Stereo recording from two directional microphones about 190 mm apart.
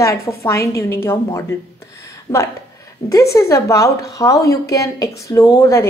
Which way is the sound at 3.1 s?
15° left (ahead or behind).